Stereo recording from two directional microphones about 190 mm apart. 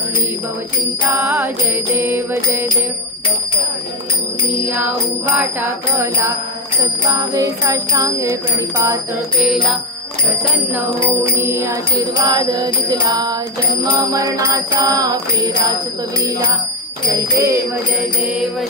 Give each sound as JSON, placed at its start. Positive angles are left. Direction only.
{"t": 1.1, "sound": "bell", "side_deg": -10}
{"t": 5.4, "sound": "bell", "side_deg": -10}
{"t": 9.4, "sound": "music", "side_deg": 0}
{"t": 11.3, "sound": "bell", "side_deg": -10}
{"t": 12.2, "sound": "music", "side_deg": -20}
{"t": 13.9, "sound": "bell", "side_deg": -20}
{"t": 16.2, "sound": "music", "side_deg": -20}
{"t": 17.4, "sound": "bell", "side_deg": -15}